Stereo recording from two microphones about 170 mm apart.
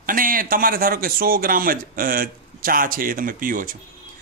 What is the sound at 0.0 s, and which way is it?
A man's voice, 55° right (ahead or behind).